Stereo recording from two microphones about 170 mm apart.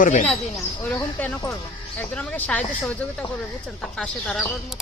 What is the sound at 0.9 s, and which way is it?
Speech, 10° left (ahead or behind).